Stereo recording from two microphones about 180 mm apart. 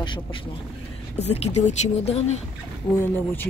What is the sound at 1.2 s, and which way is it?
Speech, 35° left (ahead or behind).